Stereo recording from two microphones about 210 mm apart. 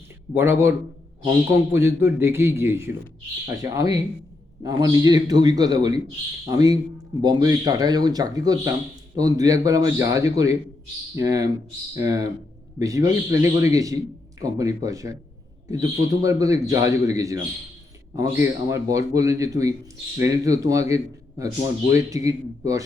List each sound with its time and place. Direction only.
0.3 s a man's voice: 10° right (ahead or behind)